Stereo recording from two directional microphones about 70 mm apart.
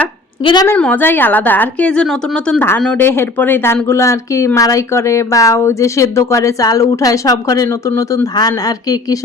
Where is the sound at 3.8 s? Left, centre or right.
Left.